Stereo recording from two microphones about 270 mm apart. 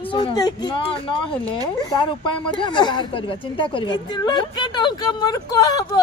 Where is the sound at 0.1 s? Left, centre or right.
Centre.